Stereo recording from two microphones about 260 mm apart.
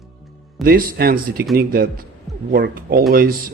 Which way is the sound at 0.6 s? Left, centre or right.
Right.